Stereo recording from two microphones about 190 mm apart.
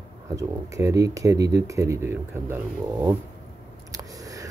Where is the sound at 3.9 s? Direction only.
20° right (ahead or behind).